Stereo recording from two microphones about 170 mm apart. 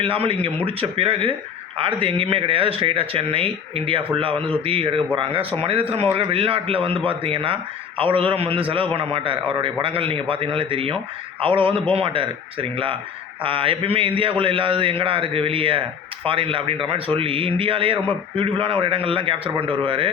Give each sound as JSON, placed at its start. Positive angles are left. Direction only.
{"t": 0.0, "sound": "speech", "side_deg": -35}